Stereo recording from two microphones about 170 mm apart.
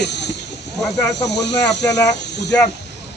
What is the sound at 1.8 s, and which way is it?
Speech, 20° left (ahead or behind).